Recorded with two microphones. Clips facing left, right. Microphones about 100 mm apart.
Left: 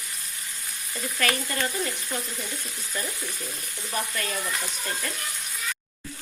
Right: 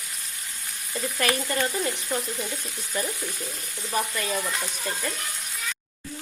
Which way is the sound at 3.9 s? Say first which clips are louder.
Right 3 dB; 20° right (ahead or behind).